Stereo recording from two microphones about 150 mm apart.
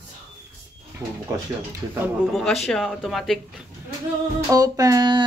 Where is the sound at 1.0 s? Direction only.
25° right (ahead or behind).